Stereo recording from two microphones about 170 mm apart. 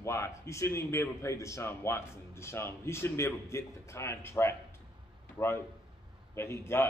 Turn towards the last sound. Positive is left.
turn(degrees=15)  # may be behind; listen again after turning